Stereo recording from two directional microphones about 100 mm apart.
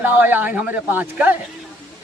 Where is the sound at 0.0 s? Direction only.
15° right (ahead or behind).